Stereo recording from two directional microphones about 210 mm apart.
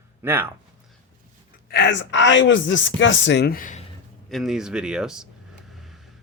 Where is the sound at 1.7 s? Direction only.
55° left (ahead or behind).